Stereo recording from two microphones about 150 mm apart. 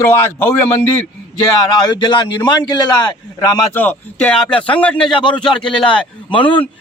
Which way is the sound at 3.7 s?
10° left (ahead or behind).